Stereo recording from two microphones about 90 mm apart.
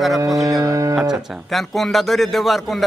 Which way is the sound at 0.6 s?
40° right (ahead or behind).